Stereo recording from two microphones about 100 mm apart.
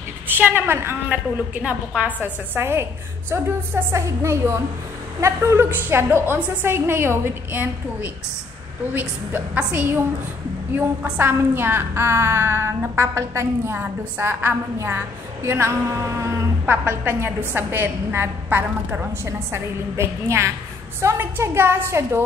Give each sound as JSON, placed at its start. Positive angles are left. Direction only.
{"t": 0.3, "sound": "a woman's voice", "side_deg": -20}